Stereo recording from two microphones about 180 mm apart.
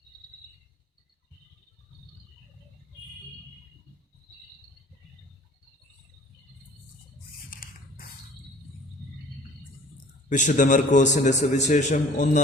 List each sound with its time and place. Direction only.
7.5 s scissors: 50° left (ahead or behind)
10.2 s a man's voice: 45° left (ahead or behind)